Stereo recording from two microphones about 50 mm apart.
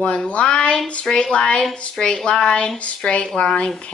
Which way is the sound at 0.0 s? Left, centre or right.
Left.